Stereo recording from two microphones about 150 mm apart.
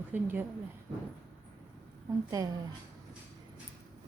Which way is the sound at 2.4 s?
25° right (ahead or behind).